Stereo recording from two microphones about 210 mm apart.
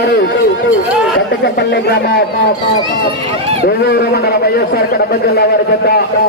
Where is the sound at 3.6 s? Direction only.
50° left (ahead or behind).